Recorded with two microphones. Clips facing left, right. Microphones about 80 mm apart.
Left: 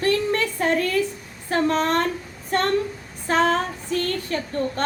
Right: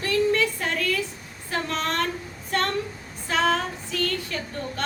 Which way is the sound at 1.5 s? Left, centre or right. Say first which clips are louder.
Left 7 dB; left.